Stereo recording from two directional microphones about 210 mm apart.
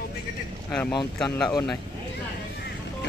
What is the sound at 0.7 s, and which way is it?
Speech, 5° left (ahead or behind).